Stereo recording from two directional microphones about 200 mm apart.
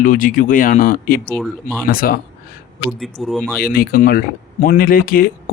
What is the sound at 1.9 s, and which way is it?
Speech, 45° left (ahead or behind).